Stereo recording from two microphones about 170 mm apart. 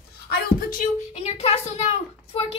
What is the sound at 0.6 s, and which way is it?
Speech, 55° left (ahead or behind).